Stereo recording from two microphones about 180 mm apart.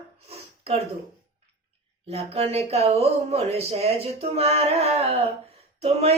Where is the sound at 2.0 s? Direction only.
35° right (ahead or behind).